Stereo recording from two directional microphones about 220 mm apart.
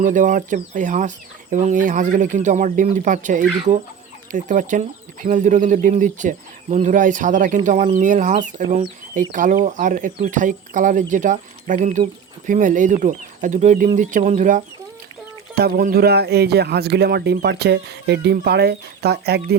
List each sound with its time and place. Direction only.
0.0 s speech: 35° right (ahead or behind)